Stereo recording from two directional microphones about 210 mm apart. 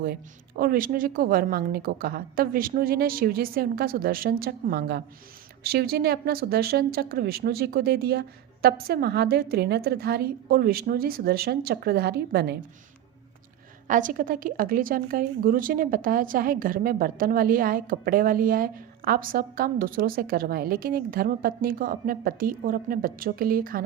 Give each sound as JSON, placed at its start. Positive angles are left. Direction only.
{"t": 0.0, "sound": "a woman's voice", "side_deg": -45}
{"t": 13.8, "sound": "a woman's voice", "side_deg": -40}